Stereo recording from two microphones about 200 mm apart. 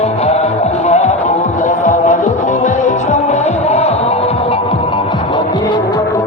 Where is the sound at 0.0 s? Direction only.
30° left (ahead or behind).